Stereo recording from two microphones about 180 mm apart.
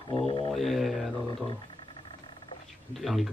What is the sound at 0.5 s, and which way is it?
Speech, centre (ahead or behind).